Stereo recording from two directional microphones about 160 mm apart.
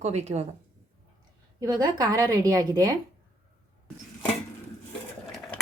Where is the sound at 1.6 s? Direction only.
25° right (ahead or behind).